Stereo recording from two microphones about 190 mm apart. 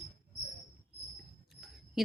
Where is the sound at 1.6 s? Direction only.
Centre (ahead or behind).